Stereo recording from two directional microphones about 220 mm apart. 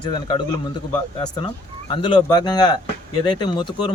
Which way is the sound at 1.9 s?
20° left (ahead or behind).